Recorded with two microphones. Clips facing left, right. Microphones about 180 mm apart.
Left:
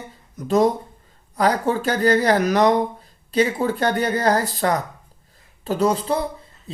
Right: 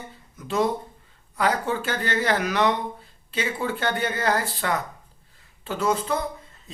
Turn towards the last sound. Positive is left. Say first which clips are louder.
# left 4 dB
turn(degrees=35)  # may be behind; listen again after turning